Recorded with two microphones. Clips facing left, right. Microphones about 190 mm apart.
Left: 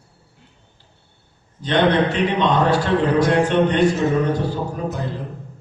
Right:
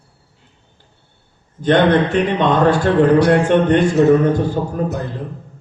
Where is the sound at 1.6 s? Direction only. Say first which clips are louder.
Right 4 dB; 50° right (ahead or behind).